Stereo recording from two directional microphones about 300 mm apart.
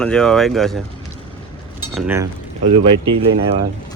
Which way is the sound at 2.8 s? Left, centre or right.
Right.